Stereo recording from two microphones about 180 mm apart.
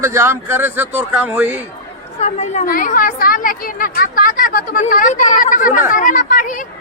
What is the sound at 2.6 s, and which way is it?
Speech, 50° left (ahead or behind).